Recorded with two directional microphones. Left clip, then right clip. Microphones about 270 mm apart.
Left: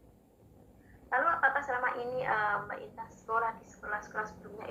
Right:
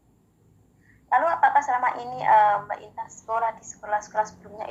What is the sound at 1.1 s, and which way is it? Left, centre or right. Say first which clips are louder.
A woman's voice: right 9 dB; right.